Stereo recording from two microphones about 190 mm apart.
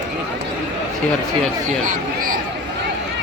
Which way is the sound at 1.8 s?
45° right (ahead or behind).